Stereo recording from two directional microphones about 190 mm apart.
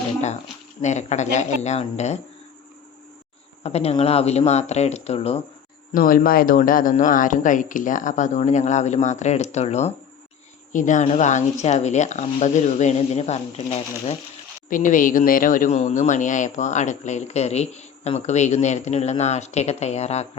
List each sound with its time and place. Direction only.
0.8 s speech: 40° left (ahead or behind)
3.6 s speech: 35° left (ahead or behind)
5.9 s speech: 45° left (ahead or behind)